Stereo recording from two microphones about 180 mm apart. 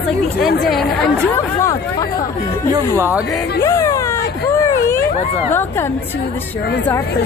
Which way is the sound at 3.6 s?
15° left (ahead or behind).